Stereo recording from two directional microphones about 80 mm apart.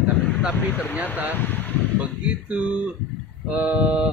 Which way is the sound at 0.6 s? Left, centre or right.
Left.